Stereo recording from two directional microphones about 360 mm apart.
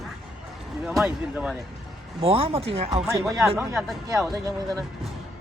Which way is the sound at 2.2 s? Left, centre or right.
Centre.